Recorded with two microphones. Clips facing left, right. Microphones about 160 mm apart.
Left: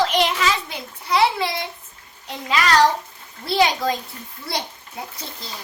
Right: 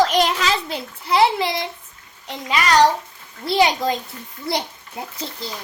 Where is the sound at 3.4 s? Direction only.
20° right (ahead or behind).